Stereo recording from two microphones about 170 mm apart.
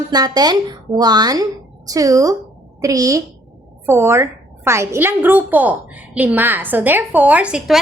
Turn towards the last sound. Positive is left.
turn(degrees=-5)  # may be behind; listen again after turning